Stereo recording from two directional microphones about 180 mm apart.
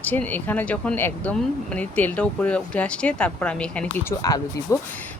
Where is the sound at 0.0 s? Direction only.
10° left (ahead or behind).